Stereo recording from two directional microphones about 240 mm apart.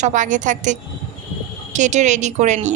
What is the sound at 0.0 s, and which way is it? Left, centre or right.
A woman's voice, right.